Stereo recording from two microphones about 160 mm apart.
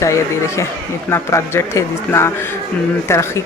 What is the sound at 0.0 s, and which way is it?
Speech, 20° left (ahead or behind).